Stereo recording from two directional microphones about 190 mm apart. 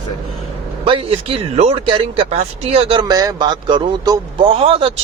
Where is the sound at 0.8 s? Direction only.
30° right (ahead or behind).